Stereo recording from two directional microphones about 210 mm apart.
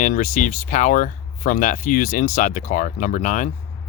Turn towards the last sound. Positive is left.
turn(degrees=35)  # may be behind; listen again after turning